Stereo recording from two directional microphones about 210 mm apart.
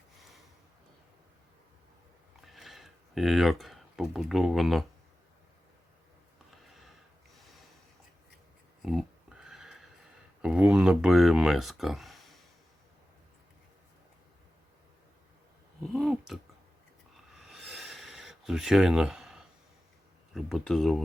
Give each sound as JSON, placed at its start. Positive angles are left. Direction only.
{"t": 2.5, "sound": "speech", "side_deg": 0}
{"t": 6.7, "sound": "sniff", "side_deg": 0}
{"t": 7.3, "sound": "snort", "side_deg": 0}
{"t": 8.8, "sound": "a sound", "side_deg": 0}
{"t": 10.4, "sound": "speech", "side_deg": -5}
{"t": 15.9, "sound": "a sound", "side_deg": 0}
{"t": 20.3, "sound": "speech", "side_deg": 0}